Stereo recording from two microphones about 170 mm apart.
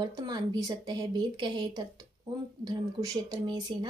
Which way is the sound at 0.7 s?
25° right (ahead or behind).